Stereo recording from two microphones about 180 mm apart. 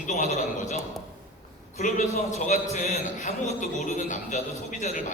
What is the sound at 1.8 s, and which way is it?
A man's voice, 40° left (ahead or behind).